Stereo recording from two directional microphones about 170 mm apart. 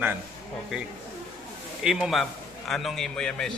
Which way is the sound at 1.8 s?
5° right (ahead or behind).